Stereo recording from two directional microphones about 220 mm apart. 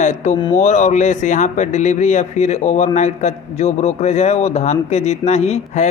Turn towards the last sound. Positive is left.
turn(degrees=30)  # may be behind; listen again after turning